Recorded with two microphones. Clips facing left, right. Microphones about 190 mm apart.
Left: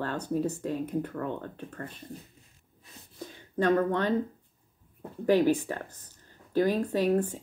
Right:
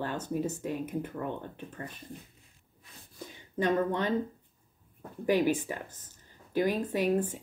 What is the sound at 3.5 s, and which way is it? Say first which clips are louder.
Speech: left 3 dB; 20° right (ahead or behind).